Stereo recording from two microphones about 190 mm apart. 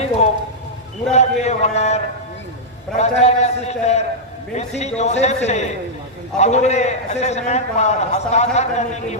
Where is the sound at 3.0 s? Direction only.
35° left (ahead or behind).